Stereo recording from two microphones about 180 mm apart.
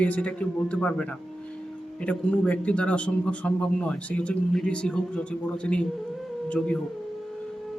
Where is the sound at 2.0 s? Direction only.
5° left (ahead or behind).